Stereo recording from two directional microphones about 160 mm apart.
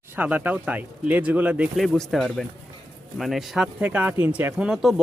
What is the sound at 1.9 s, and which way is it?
Speech, centre (ahead or behind).